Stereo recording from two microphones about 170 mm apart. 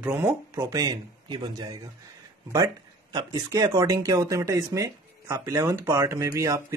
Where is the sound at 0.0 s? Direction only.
15° right (ahead or behind).